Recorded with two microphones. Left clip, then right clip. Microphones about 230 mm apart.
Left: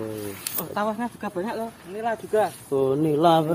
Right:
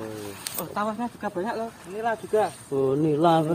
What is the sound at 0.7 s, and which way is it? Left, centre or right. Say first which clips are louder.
Speech: left 2 dB; left.